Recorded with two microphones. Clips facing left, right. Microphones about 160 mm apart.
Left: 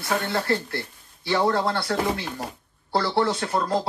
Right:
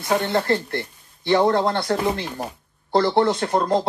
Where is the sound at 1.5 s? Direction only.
20° right (ahead or behind).